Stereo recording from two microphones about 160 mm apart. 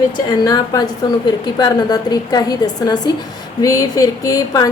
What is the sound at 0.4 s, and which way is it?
A woman's voice, 25° left (ahead or behind).